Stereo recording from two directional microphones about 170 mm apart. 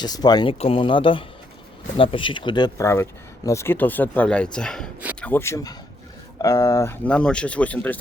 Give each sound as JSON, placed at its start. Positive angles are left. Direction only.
{"t": 0.0, "sound": "speech", "side_deg": 25}